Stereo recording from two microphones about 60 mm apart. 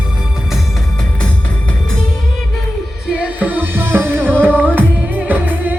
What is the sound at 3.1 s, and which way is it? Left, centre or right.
Music, right.